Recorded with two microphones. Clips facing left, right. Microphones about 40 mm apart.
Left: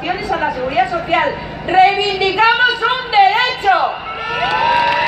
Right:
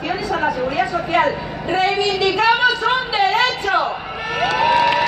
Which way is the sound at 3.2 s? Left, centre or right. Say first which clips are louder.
Left 6 dB; centre.